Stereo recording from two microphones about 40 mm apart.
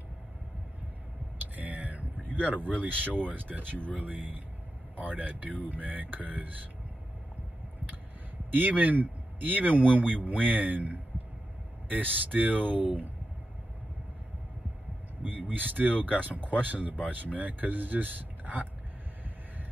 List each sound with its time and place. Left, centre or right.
1.4 s a sound: right
3.3 s speech: right
3.7 s speech: left
4.0 s speech: right
8.5 s speech: right
15.2 s speech: right